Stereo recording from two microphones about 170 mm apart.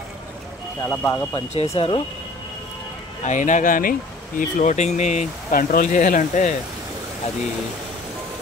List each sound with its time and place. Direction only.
0.8 s speech: 15° left (ahead or behind)
1.5 s speech: 35° left (ahead or behind)
3.3 s speech: 45° left (ahead or behind)